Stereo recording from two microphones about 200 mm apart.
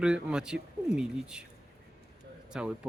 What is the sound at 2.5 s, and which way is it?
Speech, 5° right (ahead or behind).